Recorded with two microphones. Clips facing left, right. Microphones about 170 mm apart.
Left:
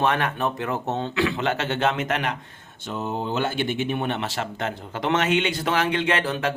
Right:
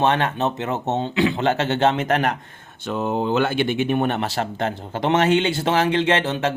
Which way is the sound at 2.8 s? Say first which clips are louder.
Right 6 dB; 65° right (ahead or behind).